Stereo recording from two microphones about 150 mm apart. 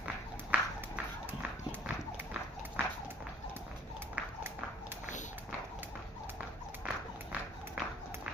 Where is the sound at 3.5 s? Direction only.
15° right (ahead or behind).